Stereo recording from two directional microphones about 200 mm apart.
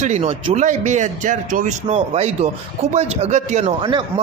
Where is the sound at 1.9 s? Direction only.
30° right (ahead or behind).